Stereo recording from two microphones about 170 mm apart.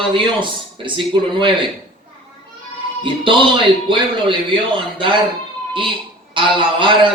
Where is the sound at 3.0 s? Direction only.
30° right (ahead or behind).